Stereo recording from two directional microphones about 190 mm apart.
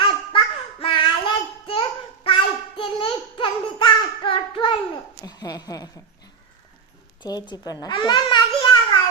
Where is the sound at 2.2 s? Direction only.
25° left (ahead or behind).